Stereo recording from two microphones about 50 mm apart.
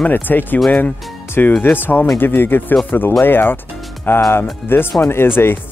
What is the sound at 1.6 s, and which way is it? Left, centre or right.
Speech, left.